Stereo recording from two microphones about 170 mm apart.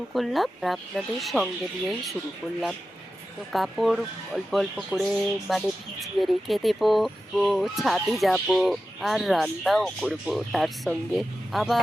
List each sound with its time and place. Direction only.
0.1 s speech: centre (ahead or behind)
3.5 s speech: centre (ahead or behind)